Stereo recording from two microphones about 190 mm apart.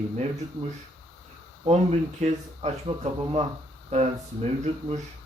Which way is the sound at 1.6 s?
35° right (ahead or behind).